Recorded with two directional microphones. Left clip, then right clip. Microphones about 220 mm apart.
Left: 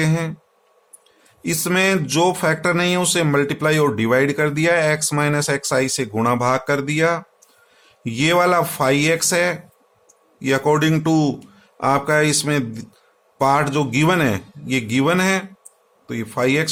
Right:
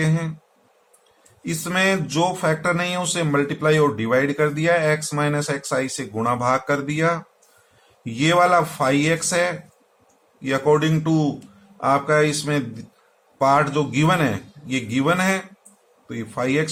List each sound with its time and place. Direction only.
0.0 s speech: 45° left (ahead or behind)
1.5 s a man's voice: 45° left (ahead or behind)